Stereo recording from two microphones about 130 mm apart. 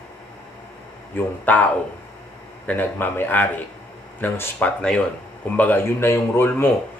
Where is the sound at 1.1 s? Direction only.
15° left (ahead or behind).